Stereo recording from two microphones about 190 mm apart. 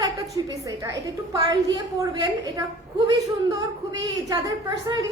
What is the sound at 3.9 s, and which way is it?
A woman's voice, 20° right (ahead or behind).